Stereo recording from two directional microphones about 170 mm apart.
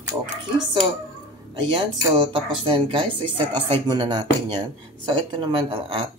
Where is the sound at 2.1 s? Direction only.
30° right (ahead or behind).